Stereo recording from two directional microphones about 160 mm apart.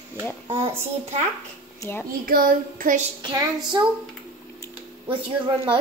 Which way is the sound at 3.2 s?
25° right (ahead or behind).